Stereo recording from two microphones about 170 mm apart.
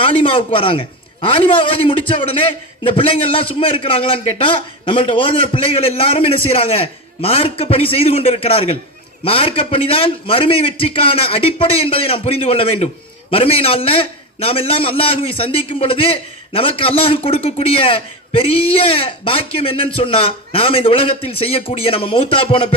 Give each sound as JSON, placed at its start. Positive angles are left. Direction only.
{"t": 0.0, "sound": "a man's voice", "side_deg": 30}